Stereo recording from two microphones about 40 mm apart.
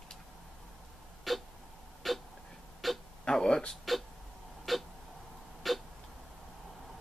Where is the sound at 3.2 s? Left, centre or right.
Centre.